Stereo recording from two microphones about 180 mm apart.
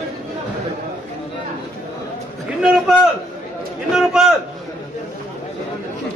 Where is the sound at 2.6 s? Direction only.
5° right (ahead or behind).